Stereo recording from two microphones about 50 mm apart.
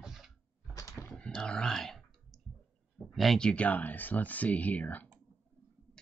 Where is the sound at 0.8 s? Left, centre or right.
Left.